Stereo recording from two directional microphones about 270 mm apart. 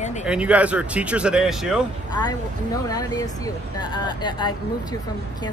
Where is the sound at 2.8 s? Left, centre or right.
Centre.